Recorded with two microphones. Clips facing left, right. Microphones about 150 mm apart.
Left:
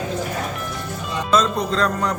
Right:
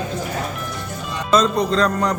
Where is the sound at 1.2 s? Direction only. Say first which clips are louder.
Right 2 dB; centre (ahead or behind).